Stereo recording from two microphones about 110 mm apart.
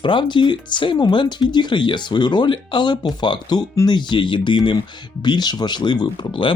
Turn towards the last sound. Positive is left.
turn(degrees=45)  # may be behind; listen again after turning